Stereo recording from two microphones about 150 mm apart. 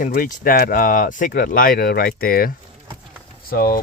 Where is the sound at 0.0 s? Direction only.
65° left (ahead or behind).